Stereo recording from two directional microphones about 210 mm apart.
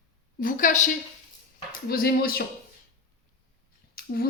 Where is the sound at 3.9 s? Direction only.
45° left (ahead or behind).